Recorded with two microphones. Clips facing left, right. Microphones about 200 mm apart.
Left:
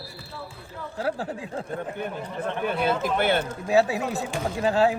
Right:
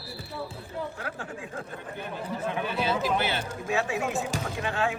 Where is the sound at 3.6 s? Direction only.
35° left (ahead or behind).